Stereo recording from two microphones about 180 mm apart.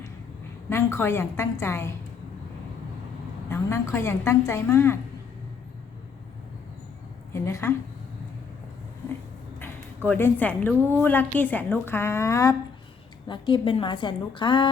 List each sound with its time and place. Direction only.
0.7 s a woman's voice: 15° left (ahead or behind)
3.5 s a woman's voice: 15° left (ahead or behind)
7.3 s a woman's voice: 15° left (ahead or behind)
9.6 s a woman's voice: 10° left (ahead or behind)
13.2 s a woman's voice: 25° left (ahead or behind)